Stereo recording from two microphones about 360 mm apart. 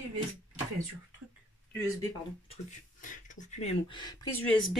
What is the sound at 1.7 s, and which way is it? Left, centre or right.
Speech, centre.